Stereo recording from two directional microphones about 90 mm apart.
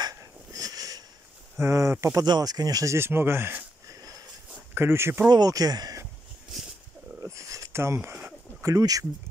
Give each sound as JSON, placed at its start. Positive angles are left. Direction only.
{"t": 0.0, "sound": "a sound", "side_deg": -40}
{"t": 1.6, "sound": "speech", "side_deg": -35}
{"t": 2.2, "sound": "speech", "side_deg": -50}
{"t": 4.7, "sound": "speech", "side_deg": -30}
{"t": 5.3, "sound": "speech", "side_deg": -45}
{"t": 7.2, "sound": "a sound", "side_deg": -35}
{"t": 8.6, "sound": "speech", "side_deg": -40}